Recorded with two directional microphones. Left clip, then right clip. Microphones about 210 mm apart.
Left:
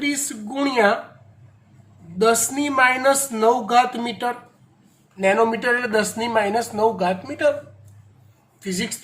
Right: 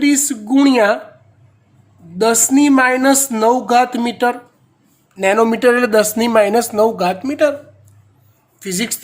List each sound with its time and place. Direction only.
0.0 s a sound: 55° right (ahead or behind)
2.1 s speech: 55° right (ahead or behind)
8.5 s speech: 55° right (ahead or behind)